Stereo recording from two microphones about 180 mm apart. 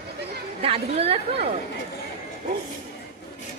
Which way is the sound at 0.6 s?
35° right (ahead or behind).